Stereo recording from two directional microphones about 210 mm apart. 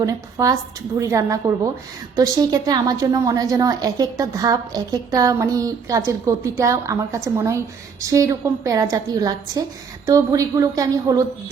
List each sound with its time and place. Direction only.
0.0 s a woman's voice: 15° right (ahead or behind)